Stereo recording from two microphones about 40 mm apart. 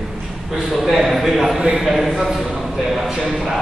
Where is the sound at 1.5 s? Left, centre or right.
Centre.